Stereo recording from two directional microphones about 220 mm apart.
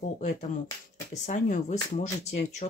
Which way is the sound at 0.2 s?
35° left (ahead or behind).